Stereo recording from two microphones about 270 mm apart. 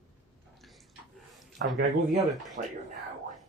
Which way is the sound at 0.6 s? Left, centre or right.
Centre.